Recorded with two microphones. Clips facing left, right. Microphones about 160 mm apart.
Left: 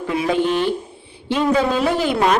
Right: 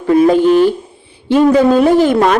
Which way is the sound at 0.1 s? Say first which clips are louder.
Right 11 dB; 45° right (ahead or behind).